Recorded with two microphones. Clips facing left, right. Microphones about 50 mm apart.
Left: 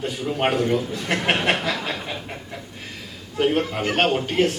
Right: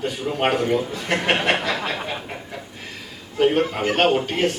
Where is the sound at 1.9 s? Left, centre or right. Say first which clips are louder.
Right 2 dB; centre.